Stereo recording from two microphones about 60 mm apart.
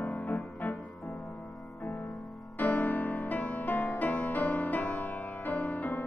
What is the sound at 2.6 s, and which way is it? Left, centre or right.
Music, left.